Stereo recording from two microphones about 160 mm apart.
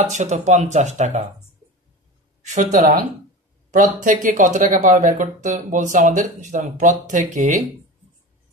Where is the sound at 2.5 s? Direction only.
50° right (ahead or behind).